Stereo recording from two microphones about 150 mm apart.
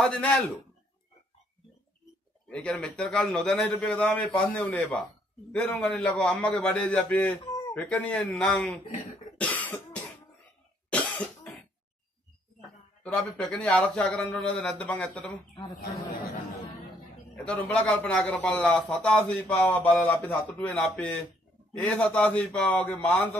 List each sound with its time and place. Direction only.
0.0 s a man's voice: 5° left (ahead or behind)
2.5 s a man's voice: 5° left (ahead or behind)
9.4 s cough: 10° left (ahead or behind)
13.0 s a man's voice: 5° left (ahead or behind)
15.6 s speech: 35° left (ahead or behind)
17.4 s a man's voice: 10° left (ahead or behind)